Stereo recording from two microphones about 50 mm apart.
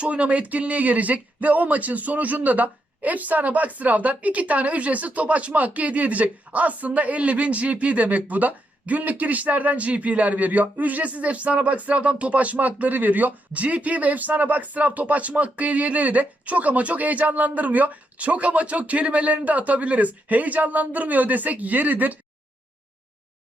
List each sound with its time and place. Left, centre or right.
0.0 s speech: right